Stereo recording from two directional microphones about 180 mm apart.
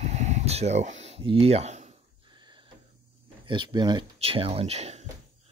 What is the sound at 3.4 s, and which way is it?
Speech, 25° right (ahead or behind).